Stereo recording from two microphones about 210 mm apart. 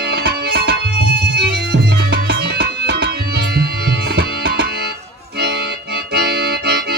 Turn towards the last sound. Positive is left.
turn(degrees=-50)  # may be behind; listen again after turning